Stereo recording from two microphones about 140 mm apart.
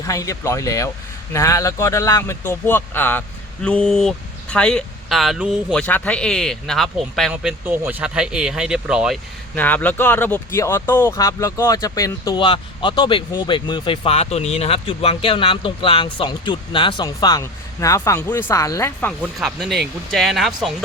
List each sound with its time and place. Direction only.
0.0 s speech: 25° left (ahead or behind); by 5.8 s 5° right (ahead or behind)
5.8 s speech: 10° left (ahead or behind)
7.6 s speech: 15° right (ahead or behind)
9.6 s speech: 10° left (ahead or behind)
19.2 s speech: 5° right (ahead or behind)